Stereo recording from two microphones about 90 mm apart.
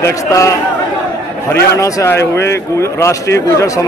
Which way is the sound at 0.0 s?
35° left (ahead or behind).